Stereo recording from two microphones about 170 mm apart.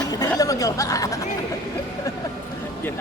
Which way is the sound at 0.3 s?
20° left (ahead or behind).